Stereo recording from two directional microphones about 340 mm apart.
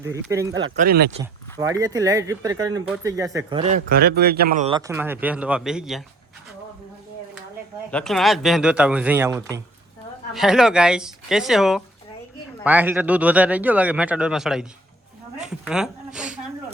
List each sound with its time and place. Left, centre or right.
0.0 s speech: centre
0.5 s speech: right
1.2 s speech: centre
7.9 s speech: centre